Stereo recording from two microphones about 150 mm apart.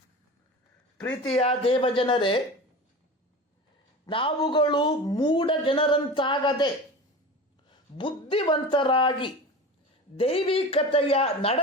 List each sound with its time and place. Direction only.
1.0 s speech: 5° left (ahead or behind)
1.4 s speech: 40° left (ahead or behind)
4.1 s speech: 35° left (ahead or behind)
7.9 s speech: 35° left (ahead or behind)